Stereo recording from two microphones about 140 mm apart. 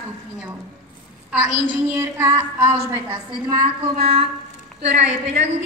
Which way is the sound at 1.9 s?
20° right (ahead or behind).